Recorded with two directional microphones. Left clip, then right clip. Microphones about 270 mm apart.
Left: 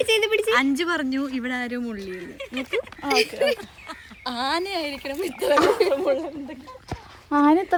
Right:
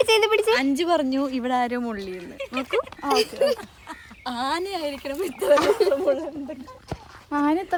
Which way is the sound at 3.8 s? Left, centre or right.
Centre.